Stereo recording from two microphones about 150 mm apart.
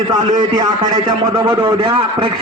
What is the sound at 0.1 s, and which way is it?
A man's voice, 30° right (ahead or behind).